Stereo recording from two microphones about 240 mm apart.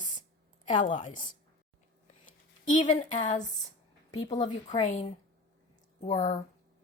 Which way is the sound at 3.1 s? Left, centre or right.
Left.